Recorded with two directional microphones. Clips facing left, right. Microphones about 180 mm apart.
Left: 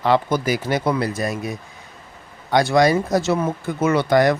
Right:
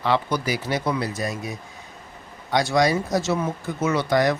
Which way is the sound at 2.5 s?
55° left (ahead or behind).